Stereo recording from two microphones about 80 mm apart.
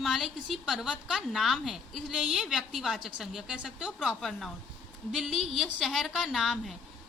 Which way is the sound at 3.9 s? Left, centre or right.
Centre.